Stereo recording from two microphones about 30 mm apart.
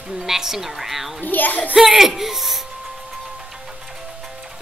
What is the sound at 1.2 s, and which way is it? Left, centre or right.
Speech, left.